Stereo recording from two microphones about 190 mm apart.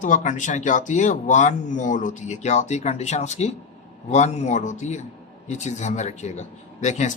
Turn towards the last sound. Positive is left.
turn(degrees=40)  # may be behind; listen again after turning